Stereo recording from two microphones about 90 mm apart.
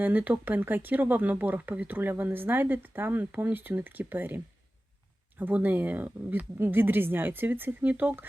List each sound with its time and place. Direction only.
0.0 s speech: 20° right (ahead or behind)
5.4 s speech: 20° right (ahead or behind)